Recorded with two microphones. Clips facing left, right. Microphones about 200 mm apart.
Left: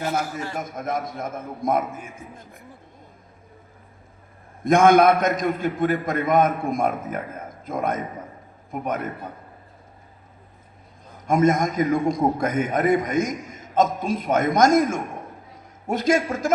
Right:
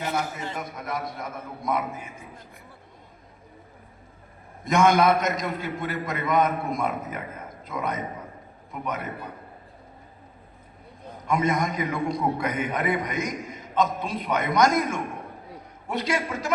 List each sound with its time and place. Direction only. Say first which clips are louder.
0.5 s a man's voice: left 5 dB; 45° left (ahead or behind)
4.6 s a man's voice: left 5 dB; 50° left (ahead or behind)
11.3 s a man's voice: left 5 dB; 45° left (ahead or behind)